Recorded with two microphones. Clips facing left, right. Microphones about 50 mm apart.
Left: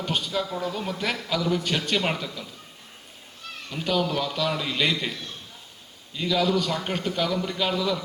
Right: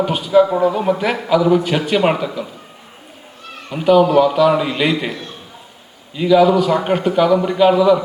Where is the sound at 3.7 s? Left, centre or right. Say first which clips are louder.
Right 14 dB; centre.